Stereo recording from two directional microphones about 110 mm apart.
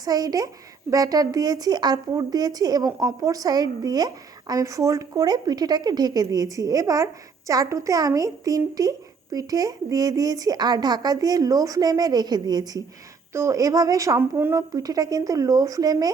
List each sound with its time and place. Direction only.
0.0 s a woman's voice: 35° right (ahead or behind)
14.2 s speech: 20° right (ahead or behind)
14.7 s a woman's voice: 35° right (ahead or behind)